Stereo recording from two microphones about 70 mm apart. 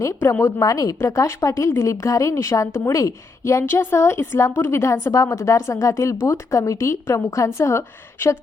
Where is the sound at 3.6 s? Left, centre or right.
Left.